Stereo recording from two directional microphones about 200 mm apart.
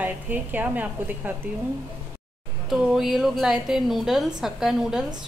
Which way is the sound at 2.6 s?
Centre (ahead or behind).